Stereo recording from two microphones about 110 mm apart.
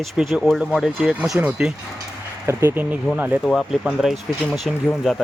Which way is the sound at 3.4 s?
5° right (ahead or behind).